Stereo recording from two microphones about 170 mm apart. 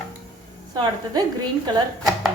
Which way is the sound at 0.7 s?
25° right (ahead or behind).